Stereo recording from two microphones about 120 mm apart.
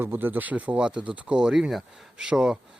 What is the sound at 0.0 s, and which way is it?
Speech, 15° right (ahead or behind).